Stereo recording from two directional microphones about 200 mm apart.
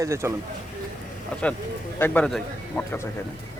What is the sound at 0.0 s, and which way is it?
Speech, 15° right (ahead or behind).